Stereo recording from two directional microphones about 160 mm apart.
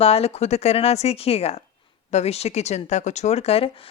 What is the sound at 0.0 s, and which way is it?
Speech, 40° left (ahead or behind).